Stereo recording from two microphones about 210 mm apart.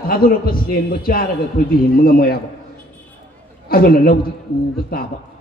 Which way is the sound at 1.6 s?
40° left (ahead or behind).